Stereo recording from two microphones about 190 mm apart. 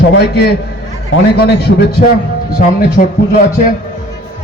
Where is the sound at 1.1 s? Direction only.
90° left.